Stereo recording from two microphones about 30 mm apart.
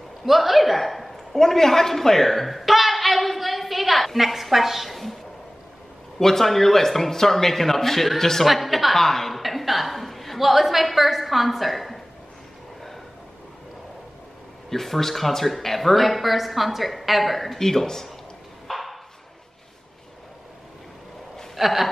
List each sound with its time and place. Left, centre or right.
0.2 s a sound: centre
6.1 s speech: centre
8.5 s speech: centre
9.0 s a woman's voice: centre
14.7 s speech: centre
17.6 s speech: centre
18.7 s a sound: centre
21.5 s speech: centre